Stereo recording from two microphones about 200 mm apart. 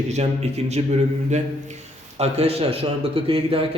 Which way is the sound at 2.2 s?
30° right (ahead or behind).